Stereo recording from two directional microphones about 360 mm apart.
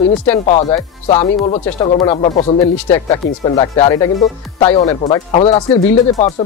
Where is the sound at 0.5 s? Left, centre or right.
Centre.